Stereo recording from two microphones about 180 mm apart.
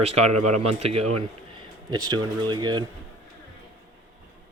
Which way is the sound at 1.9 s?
25° right (ahead or behind).